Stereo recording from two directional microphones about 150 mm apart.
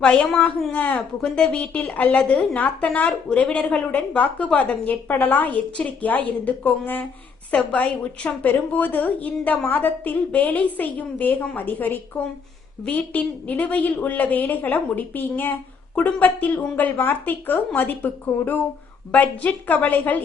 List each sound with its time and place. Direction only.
0.0 s a woman's voice: 10° left (ahead or behind)